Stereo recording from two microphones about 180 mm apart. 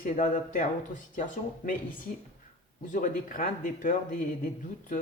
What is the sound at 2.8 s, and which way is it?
Speech, 45° left (ahead or behind).